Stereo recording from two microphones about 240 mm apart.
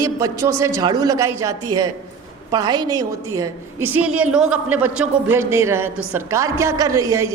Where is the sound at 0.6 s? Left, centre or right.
Centre.